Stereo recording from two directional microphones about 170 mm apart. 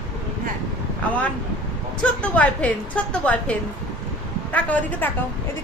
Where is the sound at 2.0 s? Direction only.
10° left (ahead or behind).